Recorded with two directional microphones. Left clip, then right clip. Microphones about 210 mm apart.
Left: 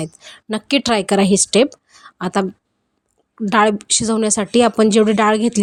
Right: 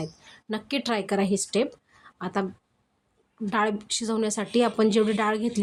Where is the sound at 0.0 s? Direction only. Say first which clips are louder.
Left 8 dB; 35° left (ahead or behind).